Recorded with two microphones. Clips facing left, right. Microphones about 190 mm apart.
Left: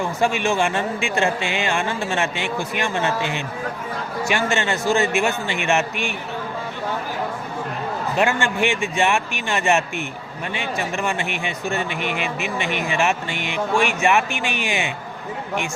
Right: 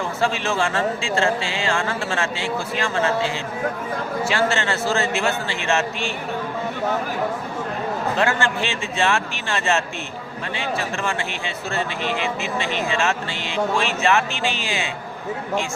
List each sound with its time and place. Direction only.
0.2 s speech: 15° left (ahead or behind)
8.1 s speech: 15° left (ahead or behind)